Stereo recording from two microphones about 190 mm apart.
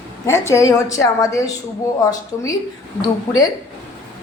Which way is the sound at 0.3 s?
15° left (ahead or behind).